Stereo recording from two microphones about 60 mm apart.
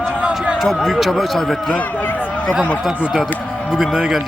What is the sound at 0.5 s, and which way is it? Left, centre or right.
Speech, centre.